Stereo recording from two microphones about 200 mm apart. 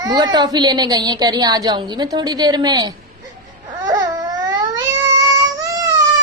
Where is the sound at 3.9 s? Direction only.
20° right (ahead or behind).